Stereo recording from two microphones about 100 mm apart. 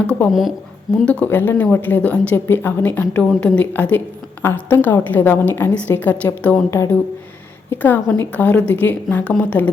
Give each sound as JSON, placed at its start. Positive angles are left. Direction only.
{"t": 0.3, "sound": "speech", "side_deg": 0}
{"t": 1.0, "sound": "a woman's voice", "side_deg": 15}
{"t": 8.0, "sound": "a woman's voice", "side_deg": 30}
{"t": 8.3, "sound": "speech", "side_deg": 15}